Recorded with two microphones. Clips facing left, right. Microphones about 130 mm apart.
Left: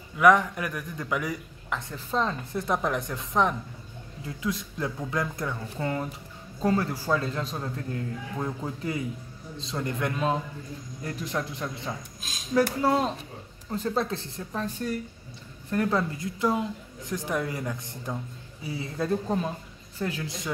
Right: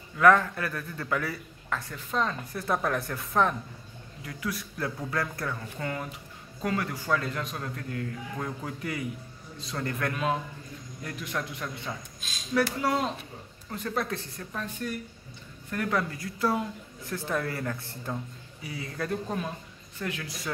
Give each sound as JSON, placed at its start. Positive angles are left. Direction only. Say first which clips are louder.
{"t": 0.2, "sound": "a man's voice", "louder": "left 1 dB", "side_deg": 15}